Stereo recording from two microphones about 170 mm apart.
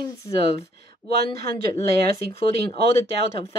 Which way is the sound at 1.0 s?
5° left (ahead or behind).